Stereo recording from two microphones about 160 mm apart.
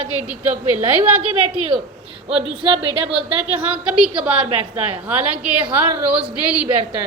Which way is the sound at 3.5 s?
5° right (ahead or behind).